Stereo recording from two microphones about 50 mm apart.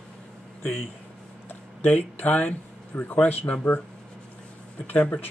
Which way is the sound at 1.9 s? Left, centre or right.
Left.